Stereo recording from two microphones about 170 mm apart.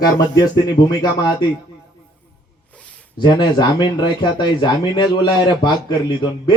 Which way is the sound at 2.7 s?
5° left (ahead or behind).